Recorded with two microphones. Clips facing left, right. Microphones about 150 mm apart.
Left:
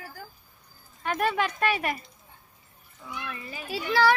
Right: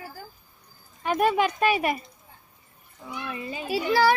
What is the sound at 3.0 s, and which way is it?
Speech, 20° right (ahead or behind).